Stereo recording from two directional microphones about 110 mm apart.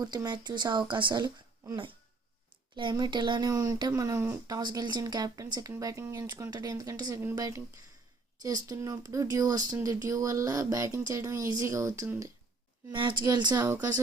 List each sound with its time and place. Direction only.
0.0 s speech: 40° right (ahead or behind)
3.0 s speech: 45° right (ahead or behind); by 12.1 s 30° right (ahead or behind)
12.9 s speech: 45° right (ahead or behind)
13.7 s speech: 25° right (ahead or behind)